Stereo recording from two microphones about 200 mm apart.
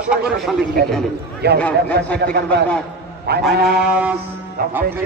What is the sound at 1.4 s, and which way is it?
A man's voice, 55° right (ahead or behind).